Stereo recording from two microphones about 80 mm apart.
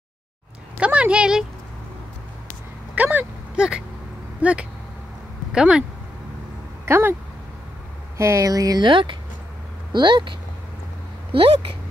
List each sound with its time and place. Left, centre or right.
0.7 s a sound: centre
2.9 s speech: right
3.5 s speech: centre
6.9 s speech: right
8.2 s speech: right
8.8 s speech: right
9.9 s speech: right